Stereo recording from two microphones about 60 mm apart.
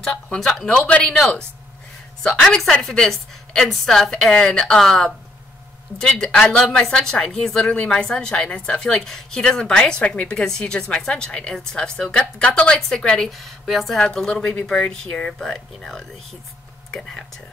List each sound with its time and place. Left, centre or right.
0.0 s a woman's voice: centre
0.8 s speech: left
2.7 s a woman's voice: centre
13.9 s a woman's voice: centre